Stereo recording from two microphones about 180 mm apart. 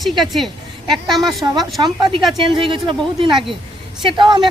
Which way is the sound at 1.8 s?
25° right (ahead or behind).